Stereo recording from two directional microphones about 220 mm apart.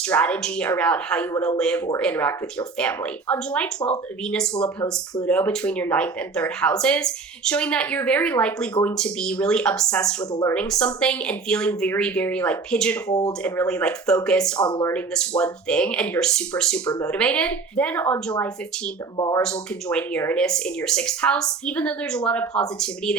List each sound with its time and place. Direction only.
0.1 s speech: 5° left (ahead or behind)
13.1 s speech: 15° left (ahead or behind)
13.4 s speech: 5° left (ahead or behind)
14.6 s speech: 20° left (ahead or behind)
14.9 s speech: 5° left (ahead or behind)
19.4 s speech: 5° left (ahead or behind)